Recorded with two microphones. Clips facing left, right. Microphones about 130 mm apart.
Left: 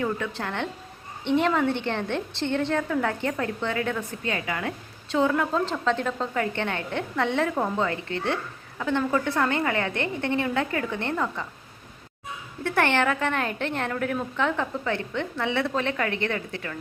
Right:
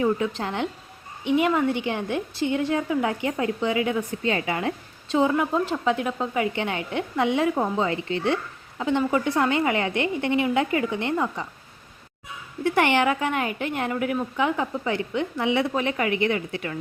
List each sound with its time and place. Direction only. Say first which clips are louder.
0.0 s a woman's voice: right 5 dB; 20° right (ahead or behind)
12.7 s a woman's voice: right 2 dB; 15° right (ahead or behind)